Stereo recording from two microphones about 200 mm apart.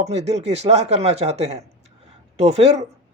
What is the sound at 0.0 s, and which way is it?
Speech, 35° right (ahead or behind).